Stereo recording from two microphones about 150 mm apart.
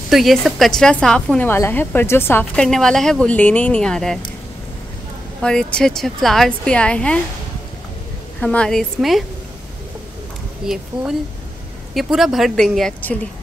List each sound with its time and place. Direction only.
0.1 s a woman's voice: centre (ahead or behind)
5.4 s a woman's voice: 5° left (ahead or behind)
8.4 s a woman's voice: 5° left (ahead or behind)
10.7 s a woman's voice: 5° right (ahead or behind)